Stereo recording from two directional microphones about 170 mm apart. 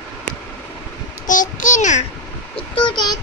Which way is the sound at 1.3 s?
50° left (ahead or behind).